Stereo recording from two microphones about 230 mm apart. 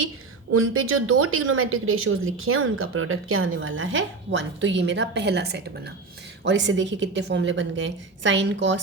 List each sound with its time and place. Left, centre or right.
0.5 s a woman's voice: right